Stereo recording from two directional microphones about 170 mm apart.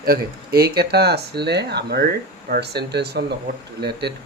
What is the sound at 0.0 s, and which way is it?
Speech, 65° right (ahead or behind).